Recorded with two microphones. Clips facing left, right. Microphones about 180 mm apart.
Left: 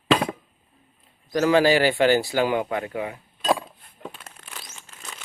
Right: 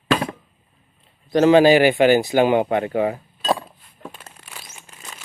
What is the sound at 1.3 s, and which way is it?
Speech, 25° right (ahead or behind).